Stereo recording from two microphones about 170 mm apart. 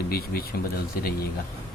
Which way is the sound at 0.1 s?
65° left (ahead or behind).